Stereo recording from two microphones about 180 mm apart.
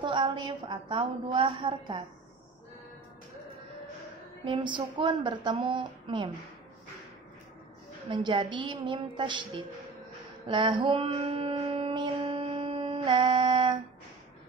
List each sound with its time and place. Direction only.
0.0 s a woman's voice: 30° right (ahead or behind)
4.5 s a woman's voice: 25° right (ahead or behind)
8.1 s a woman's voice: 25° right (ahead or behind)
10.4 s a sound: 25° right (ahead or behind)